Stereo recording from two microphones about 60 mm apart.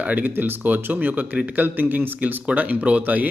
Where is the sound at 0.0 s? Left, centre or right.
Right.